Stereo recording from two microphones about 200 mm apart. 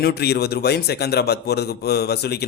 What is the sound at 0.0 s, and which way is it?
Speech, 55° left (ahead or behind).